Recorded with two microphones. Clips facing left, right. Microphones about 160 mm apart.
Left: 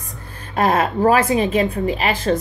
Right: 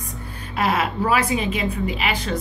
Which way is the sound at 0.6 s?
45° left (ahead or behind).